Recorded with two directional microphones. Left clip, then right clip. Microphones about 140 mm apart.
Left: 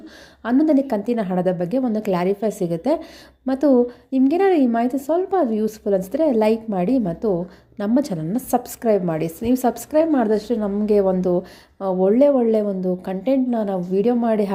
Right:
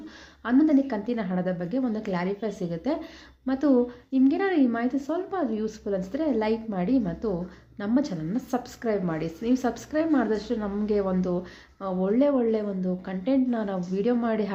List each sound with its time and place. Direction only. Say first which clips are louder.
0.4 s a woman's voice: left 5 dB; 45° left (ahead or behind)
7.8 s a woman's voice: left 6 dB; 50° left (ahead or behind)